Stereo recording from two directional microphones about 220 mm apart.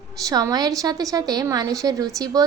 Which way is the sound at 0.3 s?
15° right (ahead or behind).